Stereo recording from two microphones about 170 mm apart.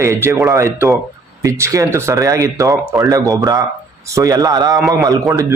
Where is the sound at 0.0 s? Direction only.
15° right (ahead or behind).